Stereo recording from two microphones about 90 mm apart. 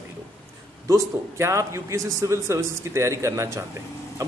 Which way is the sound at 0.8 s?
35° right (ahead or behind).